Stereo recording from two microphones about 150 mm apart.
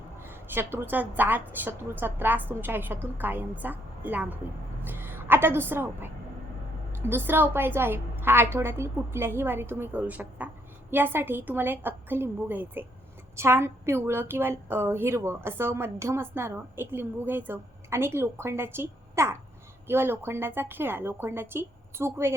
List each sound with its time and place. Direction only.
0.3 s a woman's voice: 15° right (ahead or behind)